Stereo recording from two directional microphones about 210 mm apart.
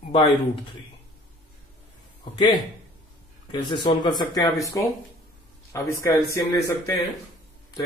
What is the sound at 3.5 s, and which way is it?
A man's voice, 20° left (ahead or behind).